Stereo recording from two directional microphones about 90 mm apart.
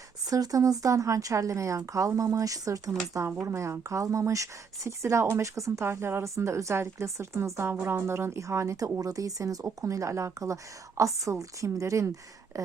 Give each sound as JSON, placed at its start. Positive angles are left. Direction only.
{"t": 0.3, "sound": "speech", "side_deg": -40}